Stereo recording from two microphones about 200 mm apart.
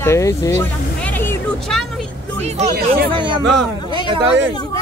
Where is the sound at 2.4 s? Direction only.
35° right (ahead or behind).